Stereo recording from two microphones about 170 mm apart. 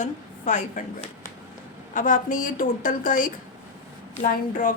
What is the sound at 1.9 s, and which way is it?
A woman's voice, 50° left (ahead or behind).